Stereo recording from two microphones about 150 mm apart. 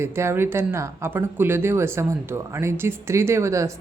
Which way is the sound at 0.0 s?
15° right (ahead or behind).